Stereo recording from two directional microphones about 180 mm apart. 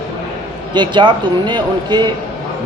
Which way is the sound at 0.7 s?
25° right (ahead or behind).